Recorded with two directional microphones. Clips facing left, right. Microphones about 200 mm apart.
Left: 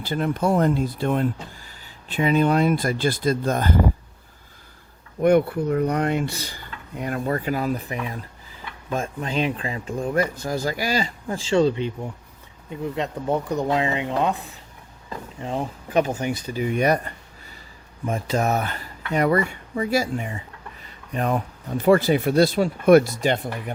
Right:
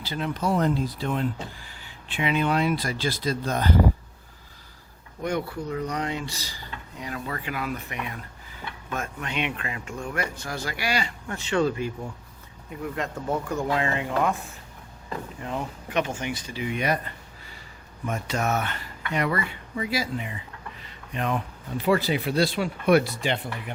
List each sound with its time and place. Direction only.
0.0 s speech: 50° left (ahead or behind)
5.2 s speech: 55° left (ahead or behind)
7.3 s speech: 35° left (ahead or behind)
11.3 s speech: 25° left (ahead or behind)
15.4 s speech: 30° left (ahead or behind)
18.0 s speech: 35° left (ahead or behind)